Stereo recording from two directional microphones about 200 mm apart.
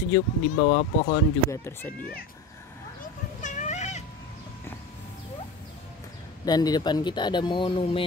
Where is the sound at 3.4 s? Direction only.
35° left (ahead or behind).